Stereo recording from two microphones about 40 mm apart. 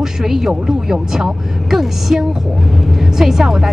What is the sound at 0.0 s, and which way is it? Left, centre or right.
A woman's voice, centre.